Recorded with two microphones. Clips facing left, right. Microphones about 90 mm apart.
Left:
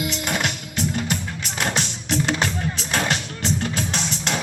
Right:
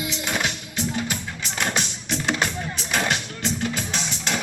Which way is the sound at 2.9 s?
35° left (ahead or behind).